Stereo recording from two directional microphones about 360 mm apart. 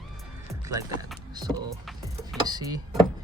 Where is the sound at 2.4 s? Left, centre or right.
Centre.